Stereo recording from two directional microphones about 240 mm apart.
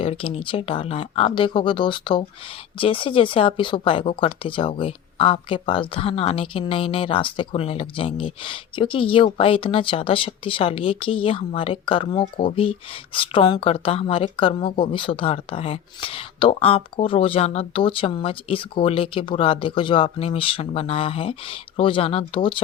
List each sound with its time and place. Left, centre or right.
0.0 s speech: left